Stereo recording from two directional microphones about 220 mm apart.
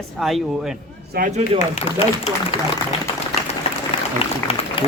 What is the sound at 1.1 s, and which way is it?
Speech, 35° right (ahead or behind).